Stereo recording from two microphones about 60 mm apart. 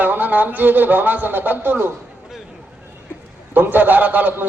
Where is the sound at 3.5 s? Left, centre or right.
Right.